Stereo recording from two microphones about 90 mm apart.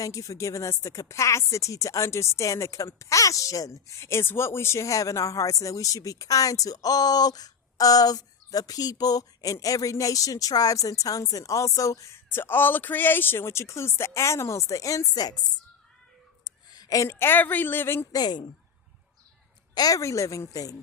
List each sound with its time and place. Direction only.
0.0 s a woman's voice: 35° left (ahead or behind)
12.3 s a woman's voice: 25° left (ahead or behind)
18.1 s a woman's voice: 50° left (ahead or behind)
19.7 s a woman's voice: 45° left (ahead or behind)